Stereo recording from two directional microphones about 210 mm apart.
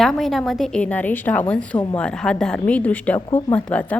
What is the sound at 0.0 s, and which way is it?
A woman's voice, centre (ahead or behind).